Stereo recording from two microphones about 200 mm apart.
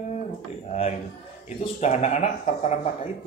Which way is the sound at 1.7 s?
35° left (ahead or behind).